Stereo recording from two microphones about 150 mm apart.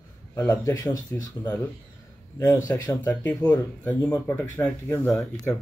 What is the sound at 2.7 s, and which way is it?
Speech, 15° left (ahead or behind).